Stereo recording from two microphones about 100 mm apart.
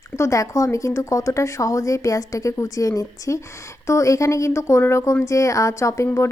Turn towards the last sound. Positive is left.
turn(degrees=30)  # may be behind; listen again after turning